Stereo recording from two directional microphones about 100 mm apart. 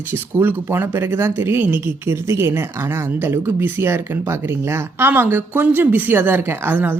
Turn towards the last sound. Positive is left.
turn(degrees=-20)  # may be behind; listen again after turning